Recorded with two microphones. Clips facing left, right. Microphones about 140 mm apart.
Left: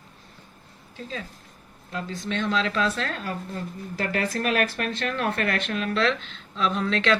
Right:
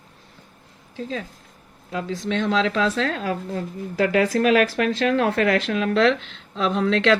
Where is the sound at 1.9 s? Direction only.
90° right.